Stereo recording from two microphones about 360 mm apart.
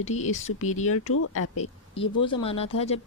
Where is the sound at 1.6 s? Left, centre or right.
Centre.